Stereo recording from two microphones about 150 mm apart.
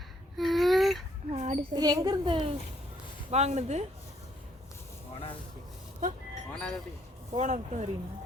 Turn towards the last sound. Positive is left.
turn(degrees=-50)  # may be behind; listen again after turning